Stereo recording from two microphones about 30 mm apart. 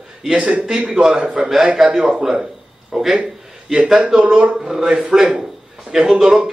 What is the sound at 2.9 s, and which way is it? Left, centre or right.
Speech, centre.